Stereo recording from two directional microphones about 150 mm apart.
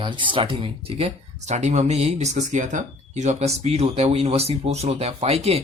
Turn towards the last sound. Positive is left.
turn(degrees=-45)  # may be behind; listen again after turning